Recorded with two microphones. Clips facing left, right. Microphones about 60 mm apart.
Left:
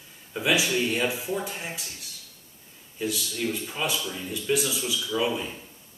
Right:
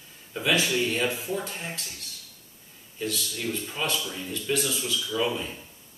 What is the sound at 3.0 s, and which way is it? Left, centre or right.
Speech, centre.